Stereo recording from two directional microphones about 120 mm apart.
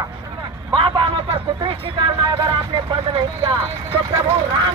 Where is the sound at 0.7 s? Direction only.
45° right (ahead or behind).